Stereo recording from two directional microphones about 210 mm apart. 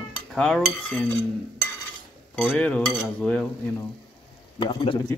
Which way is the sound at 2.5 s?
5° left (ahead or behind).